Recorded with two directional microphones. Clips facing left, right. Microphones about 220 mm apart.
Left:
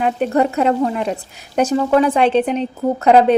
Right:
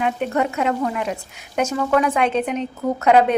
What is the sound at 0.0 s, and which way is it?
A woman's voice, 35° left (ahead or behind).